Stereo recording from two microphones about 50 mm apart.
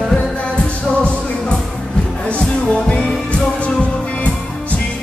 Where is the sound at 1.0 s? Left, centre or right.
Left.